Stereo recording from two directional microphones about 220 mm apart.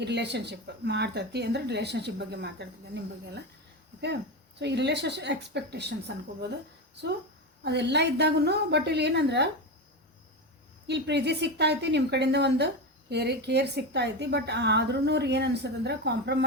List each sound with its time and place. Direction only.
0.0 s a woman's voice: 50° right (ahead or behind)
4.6 s a woman's voice: 50° right (ahead or behind)
7.6 s a woman's voice: 50° right (ahead or behind)
10.8 s a woman's voice: 50° right (ahead or behind)